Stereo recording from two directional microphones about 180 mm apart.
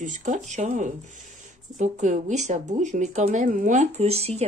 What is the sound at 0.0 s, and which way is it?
Speech, 45° right (ahead or behind).